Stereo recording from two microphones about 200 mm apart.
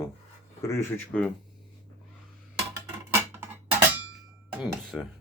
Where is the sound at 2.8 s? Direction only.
10° right (ahead or behind).